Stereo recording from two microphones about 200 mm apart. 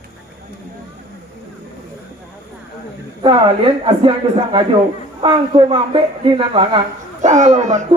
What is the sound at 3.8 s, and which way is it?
Speech, 25° right (ahead or behind).